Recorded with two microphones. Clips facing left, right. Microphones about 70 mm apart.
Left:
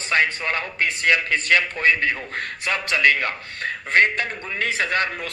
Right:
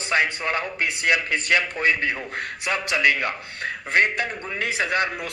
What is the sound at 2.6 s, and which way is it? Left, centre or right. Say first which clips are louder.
A man's voice: left 2 dB; centre.